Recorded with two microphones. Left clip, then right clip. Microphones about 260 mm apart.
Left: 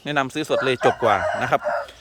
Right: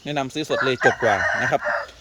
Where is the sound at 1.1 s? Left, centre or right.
Left.